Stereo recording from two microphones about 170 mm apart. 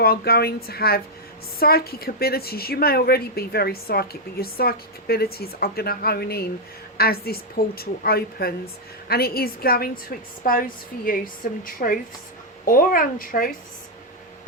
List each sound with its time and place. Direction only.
0.0 s a woman's voice: 65° left (ahead or behind)